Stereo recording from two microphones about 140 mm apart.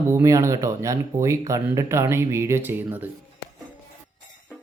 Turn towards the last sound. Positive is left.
turn(degrees=-15)  # may be behind; listen again after turning